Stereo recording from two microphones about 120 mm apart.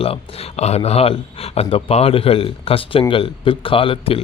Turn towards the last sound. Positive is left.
turn(degrees=50)  # may be behind; listen again after turning